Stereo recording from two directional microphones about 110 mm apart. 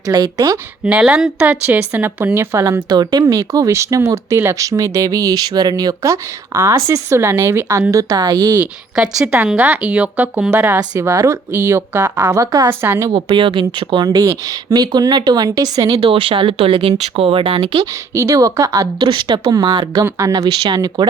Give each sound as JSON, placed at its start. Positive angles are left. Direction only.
{"t": 0.0, "sound": "speech", "side_deg": -40}
{"t": 0.9, "sound": "speech", "side_deg": -10}
{"t": 2.9, "sound": "speech", "side_deg": -40}
{"t": 9.6, "sound": "speech", "side_deg": -15}
{"t": 10.8, "sound": "speech", "side_deg": -35}
{"t": 12.1, "sound": "speech", "side_deg": -30}
{"t": 12.8, "sound": "speech", "side_deg": -20}
{"t": 13.1, "sound": "speech", "side_deg": -50}
{"t": 16.0, "sound": "speech", "side_deg": -55}
{"t": 18.1, "sound": "speech", "side_deg": -25}
{"t": 20.1, "sound": "speech", "side_deg": -30}